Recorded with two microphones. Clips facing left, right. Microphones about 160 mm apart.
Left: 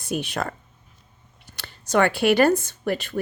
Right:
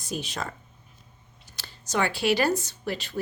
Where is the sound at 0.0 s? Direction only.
60° left (ahead or behind).